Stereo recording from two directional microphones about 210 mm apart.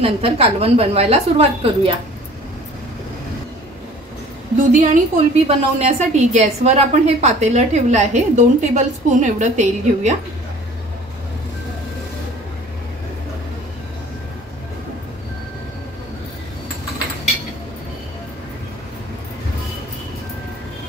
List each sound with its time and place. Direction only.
0.0 s a woman's voice: 30° right (ahead or behind)
4.7 s a woman's voice: 35° right (ahead or behind)